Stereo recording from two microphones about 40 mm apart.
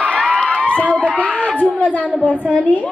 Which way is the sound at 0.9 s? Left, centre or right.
Left.